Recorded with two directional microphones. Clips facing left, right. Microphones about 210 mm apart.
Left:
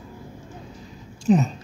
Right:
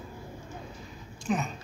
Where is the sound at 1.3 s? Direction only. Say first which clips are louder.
Left 11 dB; 30° left (ahead or behind).